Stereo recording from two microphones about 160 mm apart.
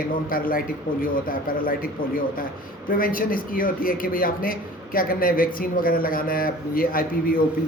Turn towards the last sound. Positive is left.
turn(degrees=65)  # may be behind; listen again after turning